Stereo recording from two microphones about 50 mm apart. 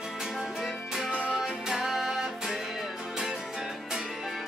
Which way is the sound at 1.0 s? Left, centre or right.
Right.